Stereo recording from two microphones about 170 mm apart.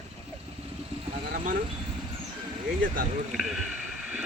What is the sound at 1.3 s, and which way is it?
Vehicle, 55° right (ahead or behind).